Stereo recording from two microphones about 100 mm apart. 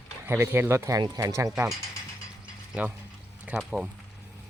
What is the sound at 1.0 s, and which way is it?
Speech, 40° right (ahead or behind).